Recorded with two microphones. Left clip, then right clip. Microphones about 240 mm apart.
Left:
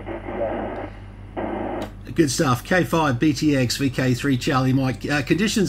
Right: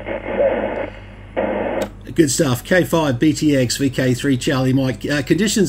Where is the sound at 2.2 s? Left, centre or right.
Centre.